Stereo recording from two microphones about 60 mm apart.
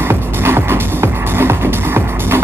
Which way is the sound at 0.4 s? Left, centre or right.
Right.